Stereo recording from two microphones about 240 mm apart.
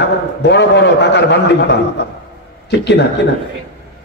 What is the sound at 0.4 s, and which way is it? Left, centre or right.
A man's voice, left.